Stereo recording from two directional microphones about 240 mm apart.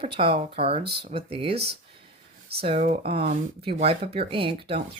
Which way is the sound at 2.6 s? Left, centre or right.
Right.